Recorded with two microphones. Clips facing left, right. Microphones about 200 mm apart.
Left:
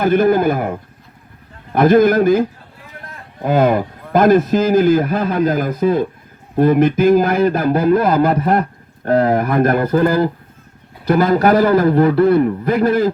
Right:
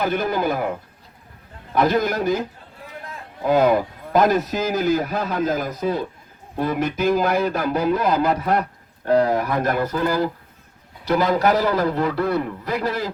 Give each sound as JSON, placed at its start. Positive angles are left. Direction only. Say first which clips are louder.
{"t": 0.0, "sound": "a man's voice", "louder": "left 9 dB", "side_deg": 50}
{"t": 1.7, "sound": "a man's voice", "louder": "left 9 dB", "side_deg": 55}
{"t": 3.4, "sound": "a man's voice", "louder": "left 2 dB", "side_deg": 55}